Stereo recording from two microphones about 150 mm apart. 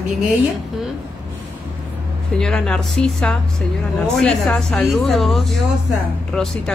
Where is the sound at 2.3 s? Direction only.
5° left (ahead or behind).